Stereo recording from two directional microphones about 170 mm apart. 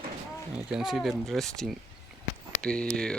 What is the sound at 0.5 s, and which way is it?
Speech, 5° right (ahead or behind).